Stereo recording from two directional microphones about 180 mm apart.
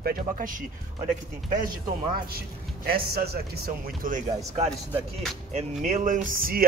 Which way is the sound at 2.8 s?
55° right (ahead or behind).